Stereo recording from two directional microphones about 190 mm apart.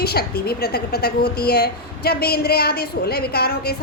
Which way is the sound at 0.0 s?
55° left (ahead or behind).